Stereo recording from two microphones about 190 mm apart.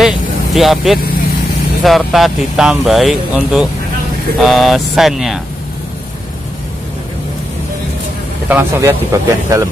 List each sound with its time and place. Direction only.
0.0 s vehicle: centre (ahead or behind)
1.8 s speech: centre (ahead or behind)
8.5 s speech: 10° right (ahead or behind)